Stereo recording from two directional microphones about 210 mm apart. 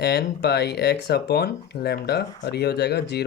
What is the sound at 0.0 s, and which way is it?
Speech, 55° left (ahead or behind).